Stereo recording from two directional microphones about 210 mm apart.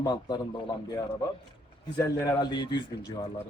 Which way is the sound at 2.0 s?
15° left (ahead or behind).